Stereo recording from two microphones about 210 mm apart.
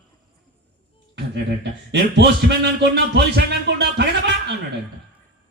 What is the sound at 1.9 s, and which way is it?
Music, 55° right (ahead or behind).